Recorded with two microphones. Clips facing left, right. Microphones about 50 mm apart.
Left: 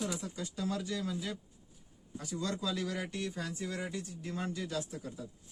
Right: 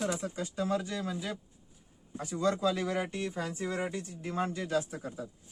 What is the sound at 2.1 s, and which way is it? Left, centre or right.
Speech, right.